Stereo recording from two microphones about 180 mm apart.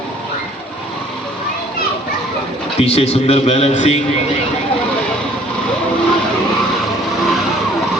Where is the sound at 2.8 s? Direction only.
35° left (ahead or behind).